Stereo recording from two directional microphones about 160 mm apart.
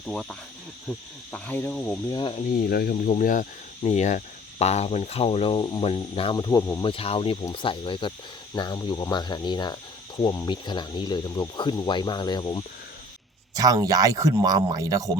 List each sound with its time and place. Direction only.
0.1 s cricket: 5° left (ahead or behind)
2.0 s speech: 25° left (ahead or behind)
2.6 s speech: 70° left (ahead or behind)
2.9 s speech: 55° left (ahead or behind)
3.8 s speech: 45° left (ahead or behind)
6.3 s speech: 20° left (ahead or behind)
6.8 s speech: 35° left (ahead or behind)
13.6 s speech: 20° right (ahead or behind)